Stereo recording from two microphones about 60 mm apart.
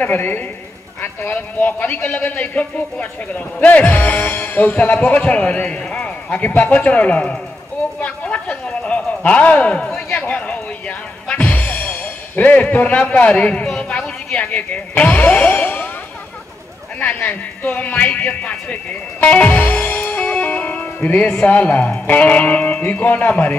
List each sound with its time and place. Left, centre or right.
0.0 s a woman's voice: left
8.0 s a sound: left
17.0 s a man's voice: left